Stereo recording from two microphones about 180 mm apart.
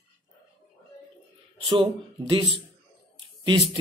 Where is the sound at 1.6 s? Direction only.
25° right (ahead or behind).